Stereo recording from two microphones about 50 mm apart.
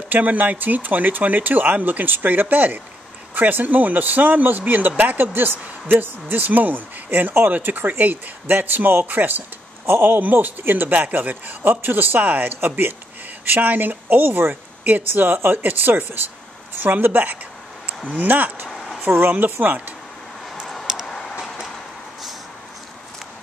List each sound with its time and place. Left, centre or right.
0.1 s speech: right
9.8 s speech: right
10.1 s speech: right
14.5 s speech: right
15.0 s speech: right
20.8 s a sound: centre
21.1 s vehicle: centre